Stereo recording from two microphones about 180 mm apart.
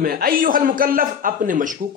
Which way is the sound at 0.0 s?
55° right (ahead or behind).